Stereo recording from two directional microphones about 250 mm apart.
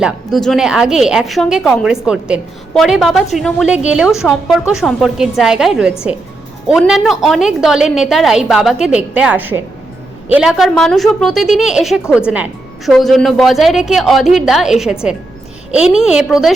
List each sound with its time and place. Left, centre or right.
0.0 s a woman's voice: centre